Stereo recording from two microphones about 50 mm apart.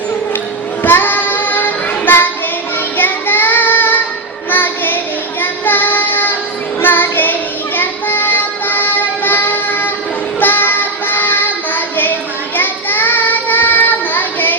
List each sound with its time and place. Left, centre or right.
0.8 s child singing: left
4.5 s music: left
5.4 s child singing: left
7.8 s music: left
10.4 s child singing: left